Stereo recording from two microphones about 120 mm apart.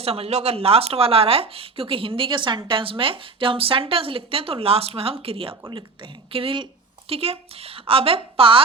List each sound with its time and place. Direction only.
0.0 s speech: 55° right (ahead or behind)